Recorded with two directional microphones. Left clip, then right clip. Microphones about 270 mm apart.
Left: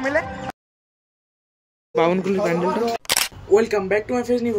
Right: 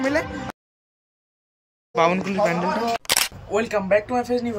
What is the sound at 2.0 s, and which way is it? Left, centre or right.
Speech, centre.